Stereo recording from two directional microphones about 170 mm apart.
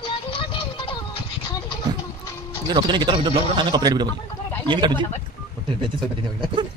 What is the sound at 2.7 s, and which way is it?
Speech, 25° right (ahead or behind).